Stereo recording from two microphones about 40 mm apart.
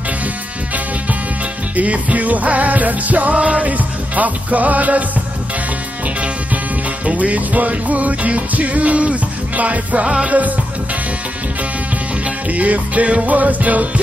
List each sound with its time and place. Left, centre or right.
1.8 s music: right
3.3 s music: right
3.7 s music: right
7.1 s music: right
12.4 s music: right